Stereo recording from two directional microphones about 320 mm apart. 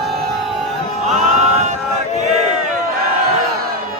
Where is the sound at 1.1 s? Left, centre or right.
Right.